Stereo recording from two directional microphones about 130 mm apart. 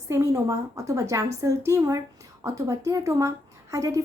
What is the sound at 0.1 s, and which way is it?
A woman's voice, 20° right (ahead or behind).